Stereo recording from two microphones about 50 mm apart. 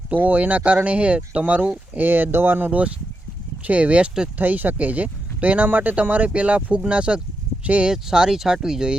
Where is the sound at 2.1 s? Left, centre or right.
Right.